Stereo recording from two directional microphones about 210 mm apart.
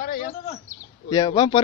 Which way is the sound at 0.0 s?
45° left (ahead or behind).